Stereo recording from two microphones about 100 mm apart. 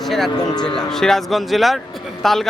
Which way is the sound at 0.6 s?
5° left (ahead or behind).